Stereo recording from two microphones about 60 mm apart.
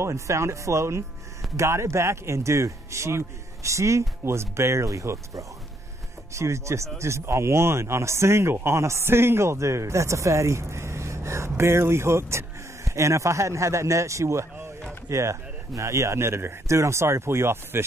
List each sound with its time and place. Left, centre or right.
0.0 s a man's voice: right
6.3 s a man's voice: right